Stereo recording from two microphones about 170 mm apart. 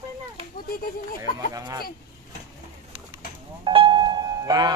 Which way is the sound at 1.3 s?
20° right (ahead or behind).